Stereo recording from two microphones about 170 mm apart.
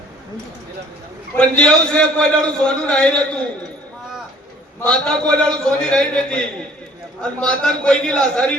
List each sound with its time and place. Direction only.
1.4 s a man's voice: 5° left (ahead or behind)
4.9 s a man's voice: 5° left (ahead or behind)